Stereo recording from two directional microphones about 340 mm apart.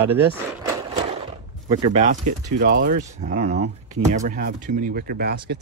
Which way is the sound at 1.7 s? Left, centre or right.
Centre.